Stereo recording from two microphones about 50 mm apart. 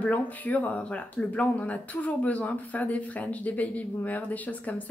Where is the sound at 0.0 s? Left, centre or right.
Left.